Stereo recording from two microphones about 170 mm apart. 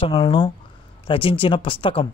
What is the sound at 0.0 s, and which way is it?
Speech, 30° left (ahead or behind).